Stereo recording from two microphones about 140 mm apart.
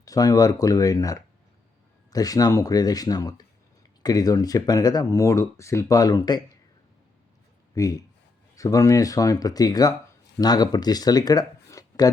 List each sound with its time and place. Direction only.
0.0 s speech: 25° left (ahead or behind)
7.8 s speech: 25° left (ahead or behind)